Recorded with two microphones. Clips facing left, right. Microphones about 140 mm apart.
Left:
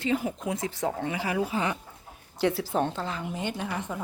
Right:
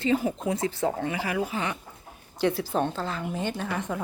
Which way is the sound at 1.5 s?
30° left (ahead or behind).